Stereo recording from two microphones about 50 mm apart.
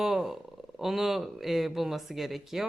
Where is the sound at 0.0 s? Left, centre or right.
Centre.